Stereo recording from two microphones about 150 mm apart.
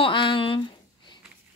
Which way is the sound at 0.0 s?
35° left (ahead or behind).